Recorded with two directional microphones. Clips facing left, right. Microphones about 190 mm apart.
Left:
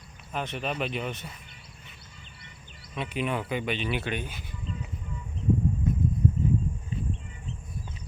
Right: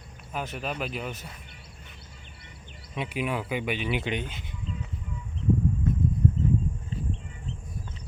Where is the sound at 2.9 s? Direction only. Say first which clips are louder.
Even; 10° right (ahead or behind).